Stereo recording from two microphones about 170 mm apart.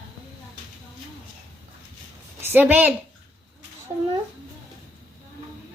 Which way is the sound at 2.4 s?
10° right (ahead or behind).